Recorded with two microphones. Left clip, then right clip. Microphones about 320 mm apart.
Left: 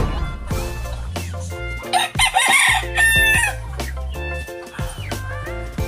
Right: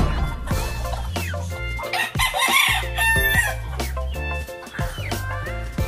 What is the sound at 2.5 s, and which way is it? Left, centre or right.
Chicken, left.